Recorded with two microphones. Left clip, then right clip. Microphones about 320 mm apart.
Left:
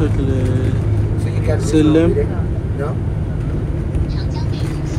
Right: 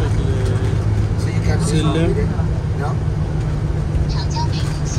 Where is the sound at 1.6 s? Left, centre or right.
Centre.